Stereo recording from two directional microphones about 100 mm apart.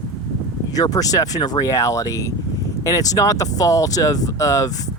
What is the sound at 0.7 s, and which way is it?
Speech, 35° left (ahead or behind).